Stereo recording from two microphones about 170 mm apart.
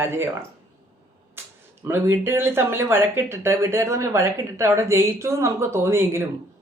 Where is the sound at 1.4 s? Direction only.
15° right (ahead or behind).